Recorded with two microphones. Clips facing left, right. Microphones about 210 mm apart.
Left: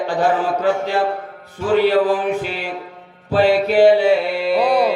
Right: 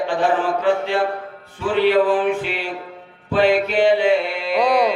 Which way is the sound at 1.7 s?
40° left (ahead or behind).